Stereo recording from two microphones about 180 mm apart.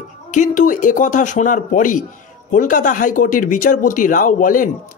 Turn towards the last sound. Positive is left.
turn(degrees=45)  # may be behind; listen again after turning